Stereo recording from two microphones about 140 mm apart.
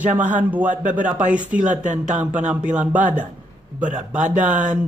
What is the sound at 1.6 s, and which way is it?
Speech, 60° right (ahead or behind).